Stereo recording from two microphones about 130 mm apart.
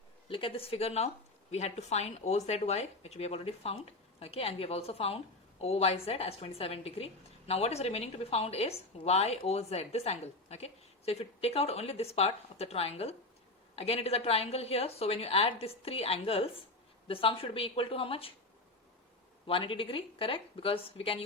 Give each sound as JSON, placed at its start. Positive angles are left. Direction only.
{"t": 0.3, "sound": "a woman's voice", "side_deg": 45}
{"t": 19.5, "sound": "a woman's voice", "side_deg": 40}